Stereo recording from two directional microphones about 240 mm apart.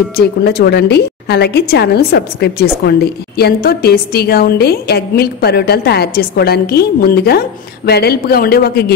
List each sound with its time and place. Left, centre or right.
0.4 s a woman's voice: left